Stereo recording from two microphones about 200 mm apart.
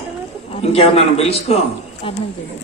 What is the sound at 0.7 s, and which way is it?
Speech, 30° left (ahead or behind).